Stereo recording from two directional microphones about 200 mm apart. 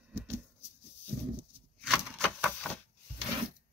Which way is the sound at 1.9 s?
Centre (ahead or behind).